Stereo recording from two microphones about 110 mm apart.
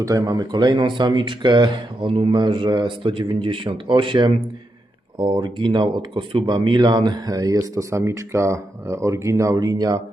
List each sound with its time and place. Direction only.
0.0 s speech: 35° right (ahead or behind)